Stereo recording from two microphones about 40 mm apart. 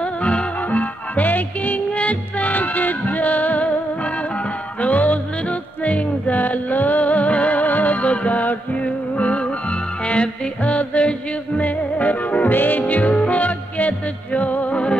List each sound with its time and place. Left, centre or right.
0.0 s music: left
0.7 s music: left
1.9 s music: left